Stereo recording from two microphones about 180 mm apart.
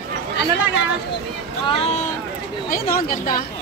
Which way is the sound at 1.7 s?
35° left (ahead or behind).